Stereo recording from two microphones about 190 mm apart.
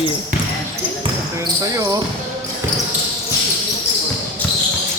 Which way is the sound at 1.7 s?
20° right (ahead or behind).